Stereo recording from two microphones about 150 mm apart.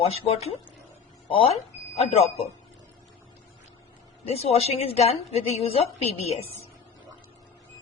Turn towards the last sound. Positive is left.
turn(degrees=45)  # may be behind; listen again after turning